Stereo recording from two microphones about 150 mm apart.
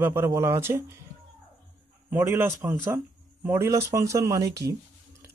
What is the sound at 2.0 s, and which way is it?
Speech, 15° right (ahead or behind).